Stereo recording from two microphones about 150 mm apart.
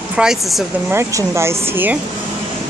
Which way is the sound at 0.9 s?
20° right (ahead or behind).